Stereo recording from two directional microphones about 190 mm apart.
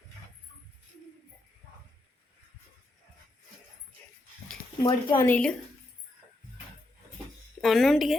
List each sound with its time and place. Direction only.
4.8 s speech: 20° left (ahead or behind)
5.3 s speech: 5° left (ahead or behind)
7.6 s speech: centre (ahead or behind)